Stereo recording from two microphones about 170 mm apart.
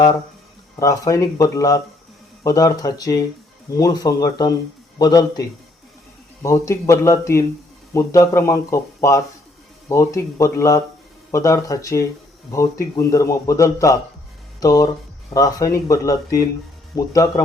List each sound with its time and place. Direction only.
0.8 s a man's voice: 20° left (ahead or behind)